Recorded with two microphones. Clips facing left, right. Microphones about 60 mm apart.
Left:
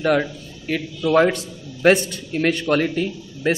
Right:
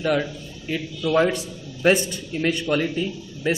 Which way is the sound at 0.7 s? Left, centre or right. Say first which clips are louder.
Left 3 dB; left.